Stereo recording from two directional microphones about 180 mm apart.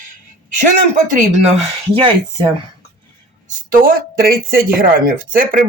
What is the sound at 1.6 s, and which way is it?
Speech, 30° right (ahead or behind).